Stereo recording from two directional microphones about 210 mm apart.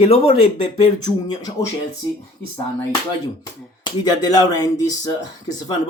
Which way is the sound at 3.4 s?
20° left (ahead or behind).